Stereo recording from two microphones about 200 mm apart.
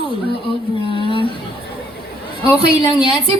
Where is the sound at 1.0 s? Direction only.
25° left (ahead or behind).